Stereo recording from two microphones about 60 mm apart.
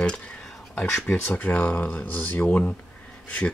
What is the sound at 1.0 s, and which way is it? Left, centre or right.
Speech, left.